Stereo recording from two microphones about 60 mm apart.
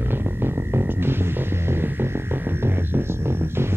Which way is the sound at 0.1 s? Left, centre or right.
Right.